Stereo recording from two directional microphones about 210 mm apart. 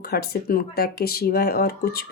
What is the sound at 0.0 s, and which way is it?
Speech, 45° left (ahead or behind).